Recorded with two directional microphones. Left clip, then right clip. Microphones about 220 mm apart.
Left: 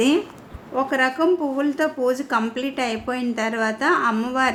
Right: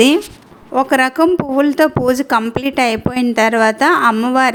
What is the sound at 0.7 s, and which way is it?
Speech, 45° right (ahead or behind).